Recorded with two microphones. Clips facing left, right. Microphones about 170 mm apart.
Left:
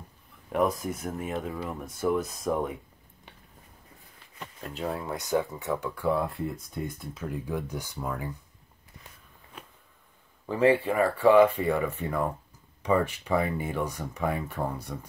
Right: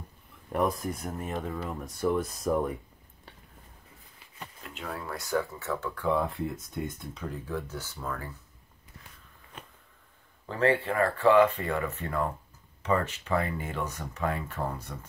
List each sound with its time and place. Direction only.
0.5 s speech: centre (ahead or behind)
4.6 s speech: 35° left (ahead or behind)
4.9 s speech: 20° left (ahead or behind)
10.5 s speech: 15° left (ahead or behind)